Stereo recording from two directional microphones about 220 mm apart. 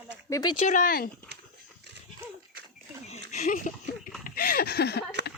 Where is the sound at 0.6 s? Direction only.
40° left (ahead or behind).